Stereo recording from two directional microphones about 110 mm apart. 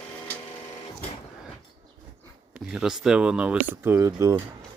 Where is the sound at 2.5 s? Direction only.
5° right (ahead or behind).